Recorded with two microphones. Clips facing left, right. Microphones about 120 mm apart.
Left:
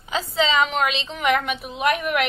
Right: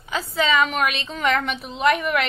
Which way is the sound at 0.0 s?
25° left (ahead or behind).